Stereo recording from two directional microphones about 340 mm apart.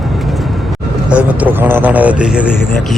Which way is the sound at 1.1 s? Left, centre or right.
Centre.